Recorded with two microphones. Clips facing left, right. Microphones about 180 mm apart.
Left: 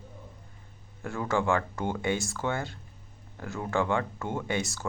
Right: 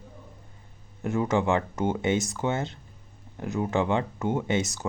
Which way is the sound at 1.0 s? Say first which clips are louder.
Right 4 dB; 20° right (ahead or behind).